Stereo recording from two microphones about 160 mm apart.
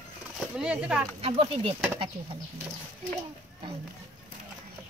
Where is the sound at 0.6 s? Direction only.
5° right (ahead or behind).